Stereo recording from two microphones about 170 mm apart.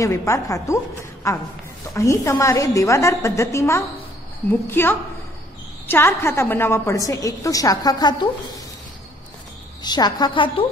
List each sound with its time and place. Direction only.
0.0 s a woman's voice: 15° left (ahead or behind)
9.8 s a woman's voice: 25° left (ahead or behind)